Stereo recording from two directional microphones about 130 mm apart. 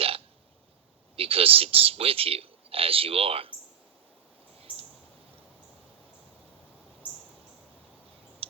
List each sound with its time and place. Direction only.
1.1 s speech: 45° right (ahead or behind)
4.5 s bird: 50° right (ahead or behind)